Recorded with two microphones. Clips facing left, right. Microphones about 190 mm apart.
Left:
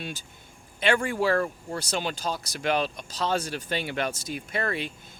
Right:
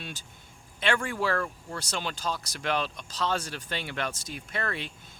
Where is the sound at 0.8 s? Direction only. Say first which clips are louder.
Left 4 dB; 15° left (ahead or behind).